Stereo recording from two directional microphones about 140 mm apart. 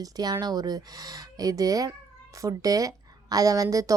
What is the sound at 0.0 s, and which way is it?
A woman's voice, 25° right (ahead or behind).